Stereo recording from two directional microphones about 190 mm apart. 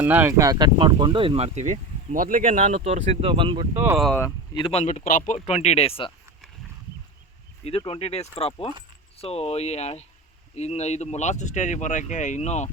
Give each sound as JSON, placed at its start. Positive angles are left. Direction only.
{"t": 0.0, "sound": "speech", "side_deg": -10}
{"t": 3.8, "sound": "speech", "side_deg": -10}
{"t": 4.5, "sound": "speech", "side_deg": 30}
{"t": 7.8, "sound": "speech", "side_deg": 30}